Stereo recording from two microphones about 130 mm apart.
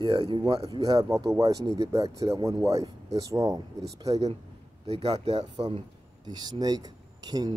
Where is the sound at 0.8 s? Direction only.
30° right (ahead or behind).